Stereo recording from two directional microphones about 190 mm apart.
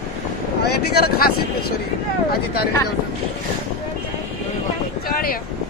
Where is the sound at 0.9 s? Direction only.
55° left (ahead or behind).